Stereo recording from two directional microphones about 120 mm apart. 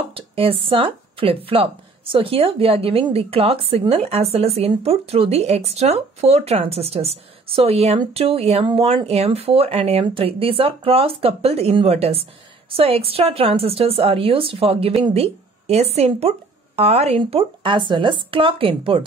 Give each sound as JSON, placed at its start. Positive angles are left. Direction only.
{"t": 0.1, "sound": "speech", "side_deg": -50}
{"t": 17.2, "sound": "speech", "side_deg": -45}